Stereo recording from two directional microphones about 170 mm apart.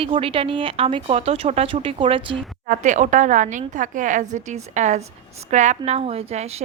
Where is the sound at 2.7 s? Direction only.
45° right (ahead or behind).